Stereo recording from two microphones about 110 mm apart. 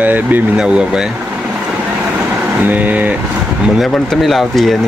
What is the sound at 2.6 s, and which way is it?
Speech, 15° right (ahead or behind).